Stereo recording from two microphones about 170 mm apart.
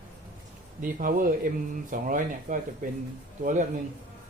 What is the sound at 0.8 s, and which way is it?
A woman's voice, 55° right (ahead or behind).